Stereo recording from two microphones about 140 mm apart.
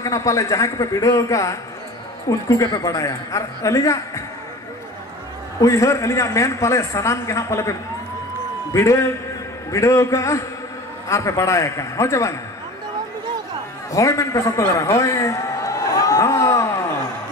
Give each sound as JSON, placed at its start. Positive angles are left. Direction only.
{"t": 0.0, "sound": "a man's voice", "side_deg": 25}
{"t": 5.6, "sound": "a man's voice", "side_deg": 20}
{"t": 8.7, "sound": "a man's voice", "side_deg": 20}
{"t": 13.9, "sound": "a sound", "side_deg": 20}